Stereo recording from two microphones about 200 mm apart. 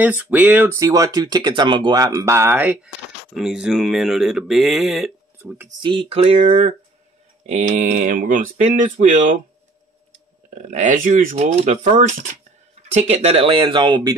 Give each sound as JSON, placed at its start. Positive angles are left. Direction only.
{"t": 0.3, "sound": "speech", "side_deg": -10}
{"t": 5.8, "sound": "speech", "side_deg": -25}
{"t": 10.6, "sound": "speech", "side_deg": -40}